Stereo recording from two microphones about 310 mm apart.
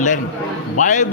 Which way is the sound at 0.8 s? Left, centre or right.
Left.